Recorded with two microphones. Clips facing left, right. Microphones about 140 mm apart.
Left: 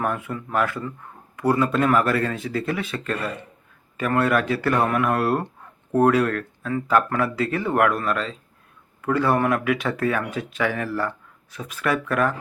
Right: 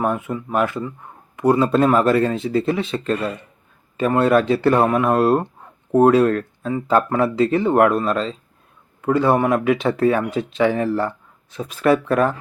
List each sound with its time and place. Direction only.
0.0 s speech: 20° right (ahead or behind)